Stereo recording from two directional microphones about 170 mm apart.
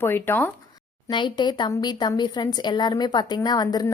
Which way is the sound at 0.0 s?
10° left (ahead or behind).